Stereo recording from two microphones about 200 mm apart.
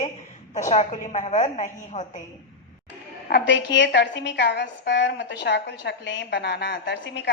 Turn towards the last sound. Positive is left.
turn(degrees=60)  # may be behind; listen again after turning